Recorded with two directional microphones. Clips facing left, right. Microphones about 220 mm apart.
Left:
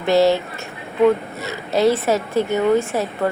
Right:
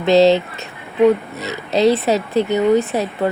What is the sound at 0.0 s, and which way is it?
Speech, 20° right (ahead or behind).